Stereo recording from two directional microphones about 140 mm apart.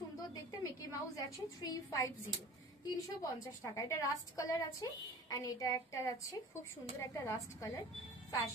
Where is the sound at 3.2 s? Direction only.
25° left (ahead or behind).